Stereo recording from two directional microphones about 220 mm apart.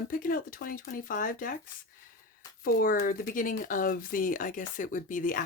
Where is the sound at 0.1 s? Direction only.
40° left (ahead or behind).